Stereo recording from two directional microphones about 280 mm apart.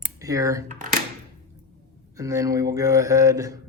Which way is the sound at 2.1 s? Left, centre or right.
Centre.